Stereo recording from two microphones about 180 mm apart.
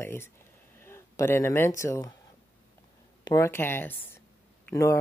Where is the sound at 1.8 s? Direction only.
15° left (ahead or behind).